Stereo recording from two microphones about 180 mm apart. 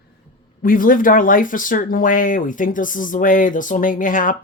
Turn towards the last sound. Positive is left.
turn(degrees=50)  # may be behind; listen again after turning